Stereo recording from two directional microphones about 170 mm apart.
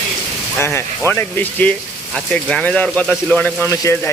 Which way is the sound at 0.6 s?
15° left (ahead or behind).